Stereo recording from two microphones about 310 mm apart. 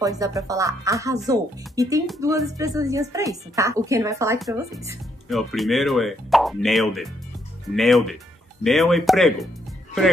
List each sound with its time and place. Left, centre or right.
0.0 s a woman's voice: centre
5.3 s speech: centre